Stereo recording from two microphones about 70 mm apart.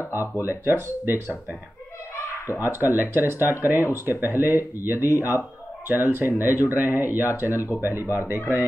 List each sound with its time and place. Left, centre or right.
0.5 s speech: right
2.6 s speech: right